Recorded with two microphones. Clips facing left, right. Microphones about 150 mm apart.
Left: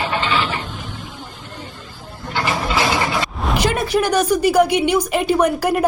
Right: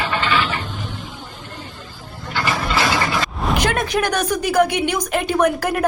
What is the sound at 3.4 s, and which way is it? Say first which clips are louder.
Speech: left 1 dB; 5° left (ahead or behind).